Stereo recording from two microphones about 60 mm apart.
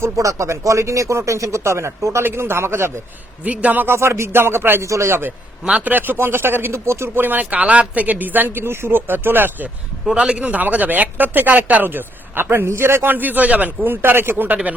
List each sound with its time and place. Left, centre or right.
0.0 s speech: right
3.4 s speech: right
3.8 s speech: right
4.8 s speech: right
5.8 s speech: right
7.3 s speech: right
7.6 s speech: centre; by 9.6 s right
10.1 s speech: centre